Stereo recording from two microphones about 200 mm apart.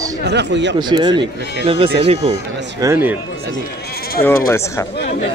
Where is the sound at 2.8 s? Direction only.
20° right (ahead or behind).